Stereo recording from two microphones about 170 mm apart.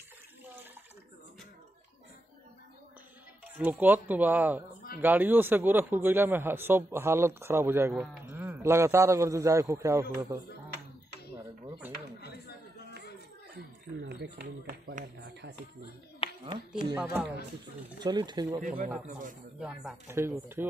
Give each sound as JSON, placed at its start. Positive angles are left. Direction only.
{"t": 3.5, "sound": "a man's voice", "side_deg": -10}
{"t": 12.2, "sound": "a sound", "side_deg": 70}
{"t": 14.0, "sound": "speech", "side_deg": -75}
{"t": 16.2, "sound": "a sound", "side_deg": 35}
{"t": 16.9, "sound": "a man's voice", "side_deg": -5}
{"t": 17.9, "sound": "speech", "side_deg": -25}
{"t": 18.6, "sound": "speech", "side_deg": -50}
{"t": 19.6, "sound": "speech", "side_deg": 0}
{"t": 20.1, "sound": "a man's voice", "side_deg": -15}